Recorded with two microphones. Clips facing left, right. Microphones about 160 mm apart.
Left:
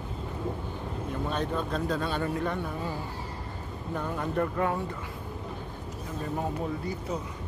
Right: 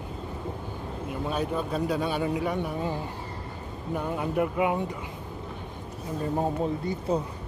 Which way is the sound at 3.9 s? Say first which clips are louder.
Right 2 dB; 10° right (ahead or behind).